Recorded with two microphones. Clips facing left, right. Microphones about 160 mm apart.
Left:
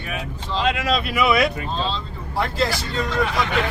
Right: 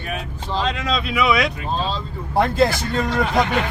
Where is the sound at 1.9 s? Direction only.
55° right (ahead or behind).